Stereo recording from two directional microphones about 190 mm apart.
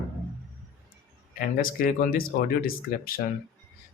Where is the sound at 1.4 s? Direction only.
50° left (ahead or behind).